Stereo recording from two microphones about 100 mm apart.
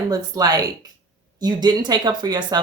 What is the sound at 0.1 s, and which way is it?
Speech, 40° right (ahead or behind).